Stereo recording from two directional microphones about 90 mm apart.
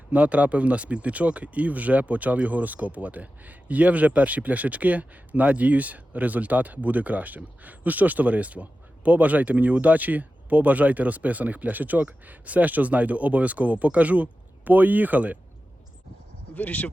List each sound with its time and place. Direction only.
0.1 s speech: 15° right (ahead or behind)
16.6 s speech: 20° left (ahead or behind)